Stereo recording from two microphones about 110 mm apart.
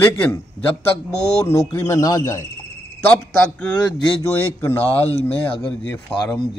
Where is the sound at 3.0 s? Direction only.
15° left (ahead or behind).